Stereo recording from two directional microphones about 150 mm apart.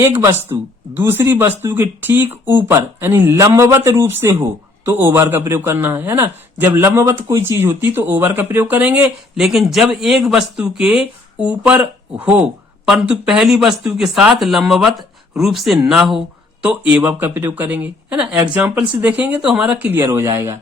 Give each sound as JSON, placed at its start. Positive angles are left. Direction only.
{"t": 0.0, "sound": "speech", "side_deg": -15}